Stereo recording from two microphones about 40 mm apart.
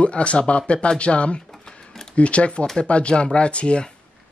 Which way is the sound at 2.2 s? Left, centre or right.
Left.